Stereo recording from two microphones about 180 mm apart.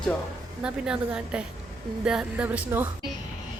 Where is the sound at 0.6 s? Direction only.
5° right (ahead or behind).